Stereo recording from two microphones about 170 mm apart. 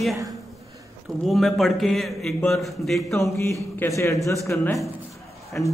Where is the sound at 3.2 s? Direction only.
15° left (ahead or behind).